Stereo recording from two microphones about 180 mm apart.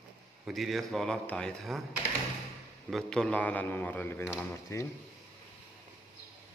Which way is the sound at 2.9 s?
5° left (ahead or behind).